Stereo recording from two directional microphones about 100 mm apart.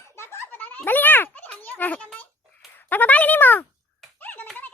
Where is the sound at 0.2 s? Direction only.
20° left (ahead or behind).